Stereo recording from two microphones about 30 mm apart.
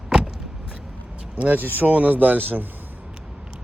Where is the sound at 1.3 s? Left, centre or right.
Right.